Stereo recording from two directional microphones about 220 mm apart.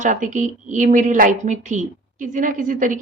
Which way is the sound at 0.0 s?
35° right (ahead or behind).